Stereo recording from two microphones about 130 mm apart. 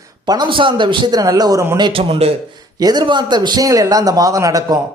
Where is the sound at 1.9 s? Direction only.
45° right (ahead or behind).